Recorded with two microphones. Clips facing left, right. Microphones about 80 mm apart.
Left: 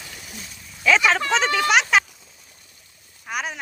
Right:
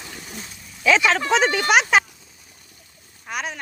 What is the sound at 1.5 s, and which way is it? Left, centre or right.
Speech, right.